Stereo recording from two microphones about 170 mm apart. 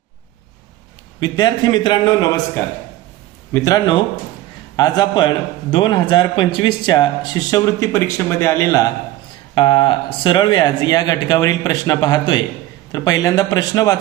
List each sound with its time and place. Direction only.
1.2 s speech: 25° left (ahead or behind)
3.5 s speech: 20° left (ahead or behind)
9.6 s speech: 30° left (ahead or behind)